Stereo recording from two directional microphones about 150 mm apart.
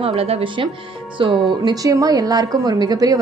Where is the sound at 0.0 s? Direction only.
40° right (ahead or behind).